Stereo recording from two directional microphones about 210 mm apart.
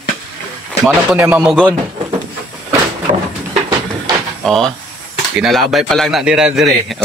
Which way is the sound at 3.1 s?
35° right (ahead or behind).